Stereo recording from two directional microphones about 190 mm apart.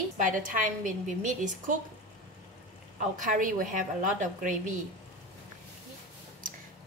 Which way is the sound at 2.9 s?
45° right (ahead or behind).